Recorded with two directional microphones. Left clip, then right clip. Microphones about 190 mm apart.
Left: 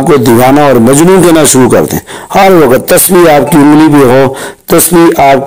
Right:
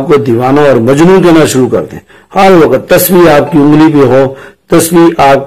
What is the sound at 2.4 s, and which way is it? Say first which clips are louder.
Speech: left 1 dB; 35° left (ahead or behind).